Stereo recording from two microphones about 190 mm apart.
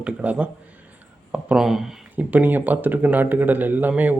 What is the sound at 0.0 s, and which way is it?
A man's voice, 5° right (ahead or behind).